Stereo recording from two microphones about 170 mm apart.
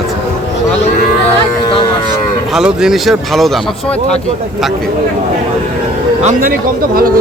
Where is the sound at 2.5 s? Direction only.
5° right (ahead or behind).